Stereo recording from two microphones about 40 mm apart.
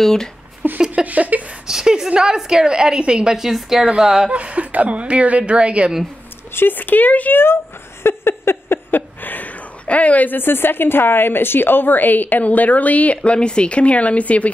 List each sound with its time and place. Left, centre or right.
0.0 s speech: centre
0.7 s a sound: right
1.0 s a sound: right
1.7 s a sound: centre
2.0 s a woman's voice: centre
3.3 s a woman's voice: centre
3.8 s a woman's voice: centre
4.3 s a woman's voice: right
6.5 s speech: left
6.8 s a woman's voice: left
8.0 s a sound: left
9.2 s a woman's voice: left